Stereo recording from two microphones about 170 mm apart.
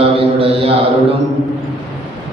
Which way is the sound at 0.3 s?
35° right (ahead or behind).